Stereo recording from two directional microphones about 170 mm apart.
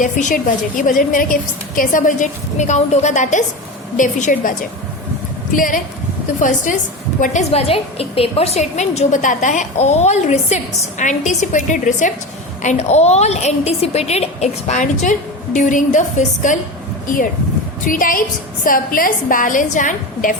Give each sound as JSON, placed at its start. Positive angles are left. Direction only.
{"t": 0.0, "sound": "a woman's voice", "side_deg": 45}
{"t": 5.5, "sound": "a woman's voice", "side_deg": 55}
{"t": 17.8, "sound": "a woman's voice", "side_deg": 55}